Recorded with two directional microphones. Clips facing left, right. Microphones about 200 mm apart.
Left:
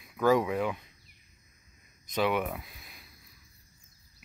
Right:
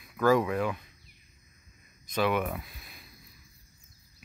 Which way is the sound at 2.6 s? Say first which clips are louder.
Right 1 dB; 15° left (ahead or behind).